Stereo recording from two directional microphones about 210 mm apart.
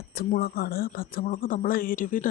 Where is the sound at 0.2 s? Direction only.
45° left (ahead or behind).